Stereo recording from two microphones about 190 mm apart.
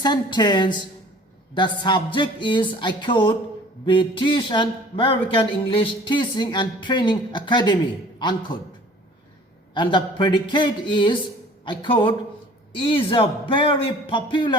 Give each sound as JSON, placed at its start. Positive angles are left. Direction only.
{"t": 0.0, "sound": "speech", "side_deg": 25}
{"t": 9.7, "sound": "speech", "side_deg": 25}